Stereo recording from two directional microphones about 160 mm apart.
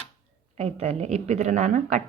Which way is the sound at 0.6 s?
40° right (ahead or behind).